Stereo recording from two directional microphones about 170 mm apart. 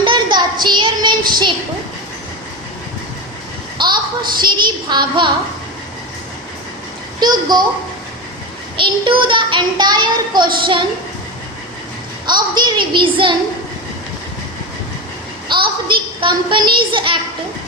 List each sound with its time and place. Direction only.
0.0 s child singing: 25° right (ahead or behind)
3.8 s a sound: 25° right (ahead or behind)
7.2 s a child's voice: 25° right (ahead or behind)
8.8 s a child's voice: 30° right (ahead or behind)
12.2 s a child's voice: 25° right (ahead or behind)
15.5 s a child's voice: 30° right (ahead or behind)